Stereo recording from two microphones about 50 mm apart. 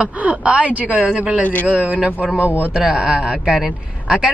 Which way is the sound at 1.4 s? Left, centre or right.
Left.